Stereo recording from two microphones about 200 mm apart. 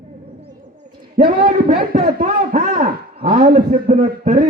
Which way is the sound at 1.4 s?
40° right (ahead or behind).